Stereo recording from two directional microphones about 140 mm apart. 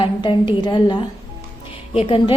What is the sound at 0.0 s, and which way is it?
A woman's voice, 35° left (ahead or behind).